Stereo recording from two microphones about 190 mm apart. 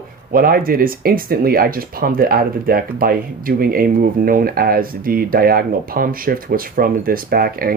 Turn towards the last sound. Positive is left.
turn(degrees=-50)  # may be behind; listen again after turning